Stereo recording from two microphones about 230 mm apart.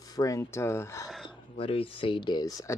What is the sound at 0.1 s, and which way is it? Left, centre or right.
Speech, centre.